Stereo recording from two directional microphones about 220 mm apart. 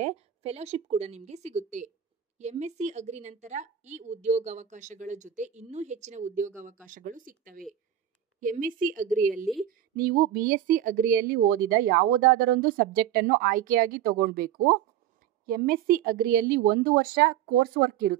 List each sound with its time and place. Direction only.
0.0 s a woman's voice: 30° right (ahead or behind)